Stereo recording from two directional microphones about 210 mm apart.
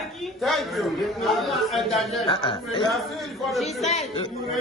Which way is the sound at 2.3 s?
25° left (ahead or behind).